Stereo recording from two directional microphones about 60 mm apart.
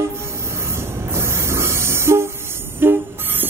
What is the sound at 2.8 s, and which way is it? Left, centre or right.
Train, right.